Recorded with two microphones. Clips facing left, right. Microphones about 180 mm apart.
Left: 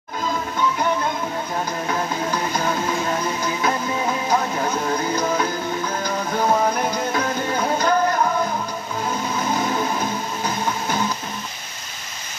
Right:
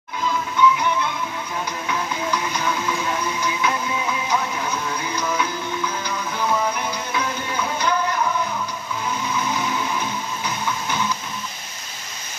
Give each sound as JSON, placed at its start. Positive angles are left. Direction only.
{"t": 0.6, "sound": "music", "side_deg": 40}
{"t": 9.3, "sound": "music", "side_deg": 40}